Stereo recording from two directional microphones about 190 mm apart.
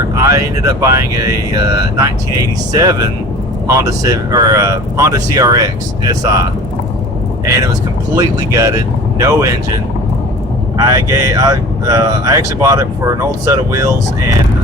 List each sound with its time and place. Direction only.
0.2 s speech: 15° right (ahead or behind)
7.4 s speech: 15° right (ahead or behind)